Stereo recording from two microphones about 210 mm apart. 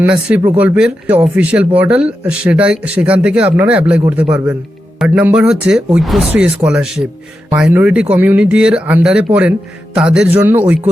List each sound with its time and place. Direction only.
0.0 s speech: 5° right (ahead or behind)